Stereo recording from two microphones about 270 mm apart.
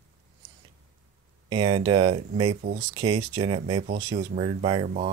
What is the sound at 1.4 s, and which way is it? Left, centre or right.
Speech, centre.